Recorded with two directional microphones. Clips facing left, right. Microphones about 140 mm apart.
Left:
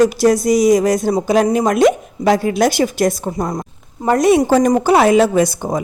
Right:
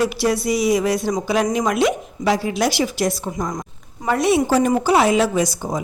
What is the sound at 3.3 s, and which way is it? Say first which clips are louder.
Speech: left 4 dB; 35° left (ahead or behind).